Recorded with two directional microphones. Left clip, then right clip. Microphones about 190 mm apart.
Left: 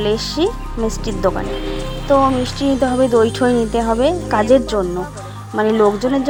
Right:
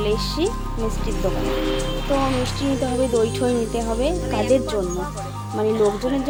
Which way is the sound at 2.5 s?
20° left (ahead or behind).